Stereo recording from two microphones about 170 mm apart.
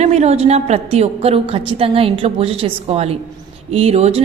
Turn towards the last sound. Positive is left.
turn(degrees=-40)  # may be behind; listen again after turning